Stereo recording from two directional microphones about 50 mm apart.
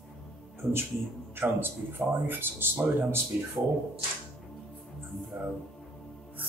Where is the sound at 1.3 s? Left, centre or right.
Right.